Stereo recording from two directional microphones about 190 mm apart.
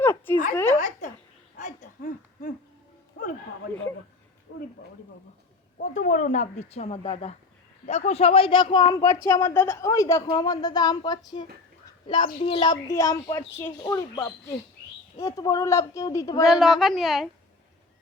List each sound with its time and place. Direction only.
0.0 s a sound: 15° left (ahead or behind)
0.8 s a woman's voice: 40° left (ahead or behind)
1.5 s a sound: 40° left (ahead or behind)
4.5 s speech: 65° left (ahead or behind)
5.8 s a woman's voice: 40° left (ahead or behind)
12.9 s speech: 15° left (ahead or behind)
16.4 s a woman's voice: centre (ahead or behind)